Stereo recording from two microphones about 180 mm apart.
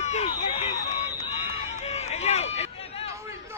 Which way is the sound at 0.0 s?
40° left (ahead or behind).